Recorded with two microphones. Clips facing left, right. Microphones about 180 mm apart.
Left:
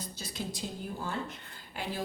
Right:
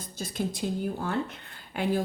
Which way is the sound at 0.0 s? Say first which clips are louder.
Right 7 dB; 50° right (ahead or behind).